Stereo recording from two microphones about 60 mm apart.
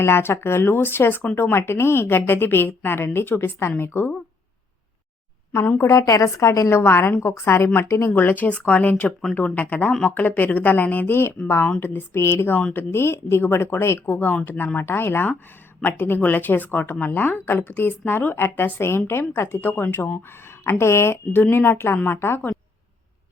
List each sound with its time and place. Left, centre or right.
0.0 s speech: left
5.7 s a woman's voice: left
6.7 s a woman's voice: left
8.1 s speech: left
11.4 s a woman's voice: left
14.1 s speech: left